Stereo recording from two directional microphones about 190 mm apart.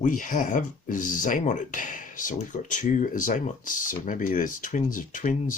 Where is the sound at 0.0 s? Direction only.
45° left (ahead or behind).